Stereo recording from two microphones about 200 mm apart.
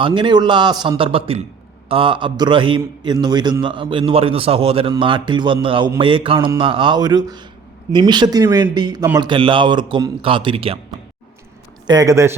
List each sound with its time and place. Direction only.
0.0 s a man's voice: 25° right (ahead or behind)
11.9 s speech: 15° right (ahead or behind)